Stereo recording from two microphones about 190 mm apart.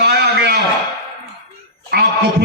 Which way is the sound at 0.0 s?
60° right (ahead or behind).